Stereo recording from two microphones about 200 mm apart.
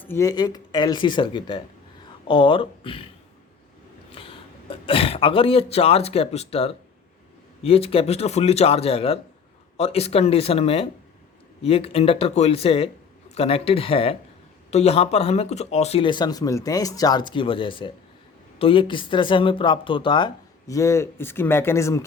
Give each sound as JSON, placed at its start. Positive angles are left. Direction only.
{"t": 0.0, "sound": "speech", "side_deg": 15}
{"t": 4.1, "sound": "speech", "side_deg": 25}